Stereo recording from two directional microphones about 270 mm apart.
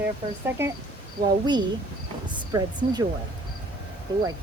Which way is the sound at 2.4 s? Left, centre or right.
Centre.